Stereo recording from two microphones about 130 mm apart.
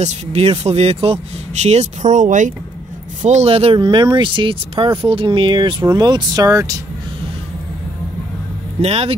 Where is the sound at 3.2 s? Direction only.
60° right (ahead or behind); by 6.8 s 25° right (ahead or behind).